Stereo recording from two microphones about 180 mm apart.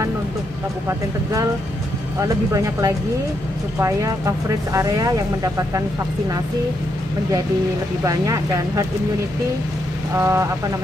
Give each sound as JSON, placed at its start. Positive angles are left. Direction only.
{"t": 2.1, "sound": "speech", "side_deg": -15}
{"t": 4.7, "sound": "speech", "side_deg": -20}
{"t": 8.0, "sound": "speech", "side_deg": -20}
{"t": 10.1, "sound": "speech", "side_deg": -15}